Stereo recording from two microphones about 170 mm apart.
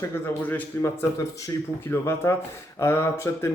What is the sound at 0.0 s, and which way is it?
Speech, 10° left (ahead or behind).